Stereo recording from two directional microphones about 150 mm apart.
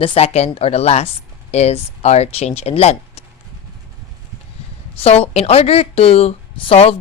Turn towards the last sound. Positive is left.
turn(degrees=40)  # may be behind; listen again after turning